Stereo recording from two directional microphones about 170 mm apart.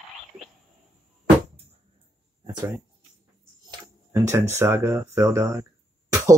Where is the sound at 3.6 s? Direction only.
20° right (ahead or behind).